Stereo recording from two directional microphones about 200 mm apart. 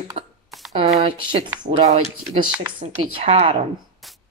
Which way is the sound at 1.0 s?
25° right (ahead or behind).